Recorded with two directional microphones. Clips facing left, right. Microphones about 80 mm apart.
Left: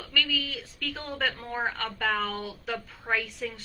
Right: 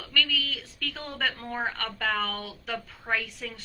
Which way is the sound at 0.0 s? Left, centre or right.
Centre.